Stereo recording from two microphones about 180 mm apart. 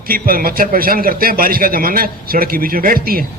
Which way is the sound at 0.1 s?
55° right (ahead or behind).